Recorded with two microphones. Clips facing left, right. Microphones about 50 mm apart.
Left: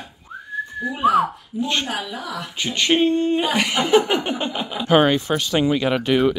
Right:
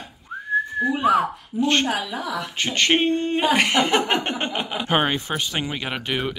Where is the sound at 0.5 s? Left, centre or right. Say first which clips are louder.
Right 6 dB; right.